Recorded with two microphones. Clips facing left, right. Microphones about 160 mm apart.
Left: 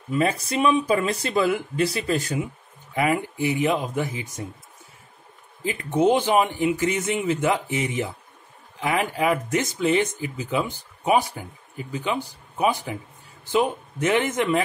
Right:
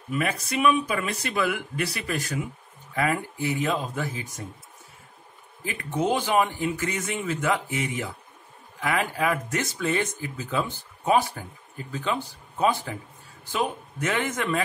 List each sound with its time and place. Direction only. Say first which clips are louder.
0.1 s speech: left 4 dB; 25° left (ahead or behind)
5.6 s speech: left 6 dB; 25° left (ahead or behind)